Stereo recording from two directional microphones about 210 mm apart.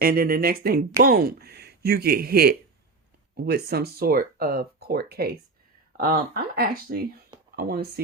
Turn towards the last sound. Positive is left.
turn(degrees=-45)  # may be behind; listen again after turning